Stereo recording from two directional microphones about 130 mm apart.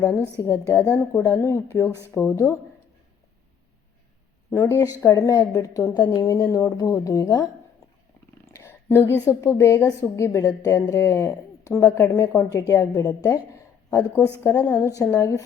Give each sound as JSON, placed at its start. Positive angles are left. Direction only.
{"t": 0.0, "sound": "speech", "side_deg": 25}
{"t": 4.5, "sound": "speech", "side_deg": 20}
{"t": 8.5, "sound": "a sound", "side_deg": 20}
{"t": 9.2, "sound": "speech", "side_deg": 20}
{"t": 12.9, "sound": "a woman's voice", "side_deg": 15}
{"t": 13.5, "sound": "a sound", "side_deg": 25}
{"t": 14.4, "sound": "speech", "side_deg": 20}